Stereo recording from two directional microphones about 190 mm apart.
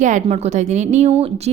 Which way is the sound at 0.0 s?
40° right (ahead or behind).